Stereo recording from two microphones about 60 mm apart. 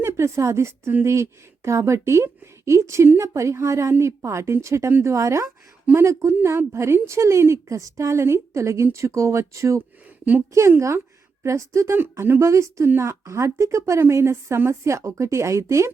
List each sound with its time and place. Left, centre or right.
0.0 s a woman's voice: right